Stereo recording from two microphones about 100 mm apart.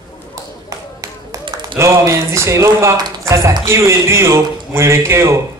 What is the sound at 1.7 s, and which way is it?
A man's voice, 30° right (ahead or behind).